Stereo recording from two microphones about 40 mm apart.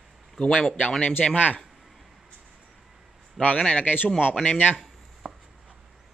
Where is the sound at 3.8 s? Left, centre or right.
Left.